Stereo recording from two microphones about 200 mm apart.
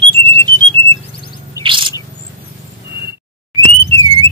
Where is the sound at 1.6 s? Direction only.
25° right (ahead or behind).